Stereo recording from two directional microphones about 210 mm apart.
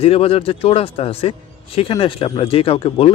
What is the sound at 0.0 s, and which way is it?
Speech, 25° left (ahead or behind).